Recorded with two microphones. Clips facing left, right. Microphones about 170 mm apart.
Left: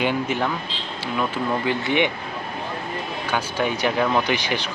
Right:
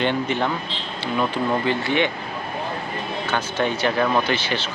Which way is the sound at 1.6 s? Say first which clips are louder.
Even; 15° left (ahead or behind).